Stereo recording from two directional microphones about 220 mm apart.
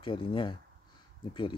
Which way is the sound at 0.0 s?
25° left (ahead or behind).